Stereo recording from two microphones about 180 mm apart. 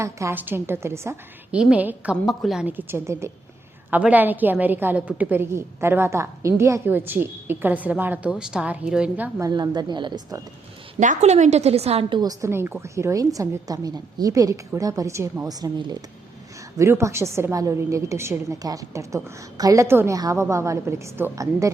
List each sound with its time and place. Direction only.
0.0 s a woman's voice: 15° right (ahead or behind)
9.5 s a woman's voice: 25° right (ahead or behind)
11.0 s a woman's voice: 40° right (ahead or behind); by 21.2 s 15° right (ahead or behind)